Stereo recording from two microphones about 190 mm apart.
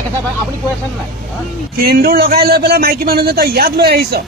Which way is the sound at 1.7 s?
50° right (ahead or behind).